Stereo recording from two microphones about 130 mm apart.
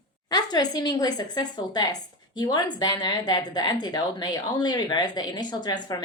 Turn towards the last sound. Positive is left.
turn(degrees=35)  # may be behind; listen again after turning